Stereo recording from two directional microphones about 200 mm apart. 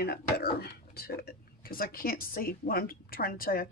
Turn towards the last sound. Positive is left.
turn(degrees=45)  # may be behind; listen again after turning